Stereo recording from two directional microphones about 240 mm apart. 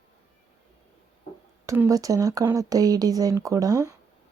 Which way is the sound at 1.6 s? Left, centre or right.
Centre.